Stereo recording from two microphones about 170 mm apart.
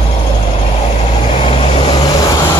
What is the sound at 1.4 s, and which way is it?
Vehicle, 35° left (ahead or behind).